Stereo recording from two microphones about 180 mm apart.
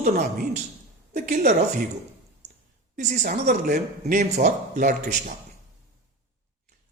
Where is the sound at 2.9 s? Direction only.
45° right (ahead or behind).